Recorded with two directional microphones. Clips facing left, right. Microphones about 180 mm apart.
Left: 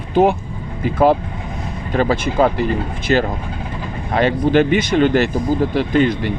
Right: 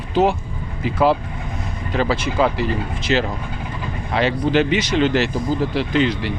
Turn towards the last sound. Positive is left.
turn(degrees=50)  # may be behind; listen again after turning